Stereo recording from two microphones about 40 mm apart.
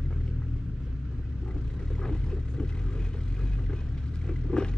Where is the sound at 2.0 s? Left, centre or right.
Centre.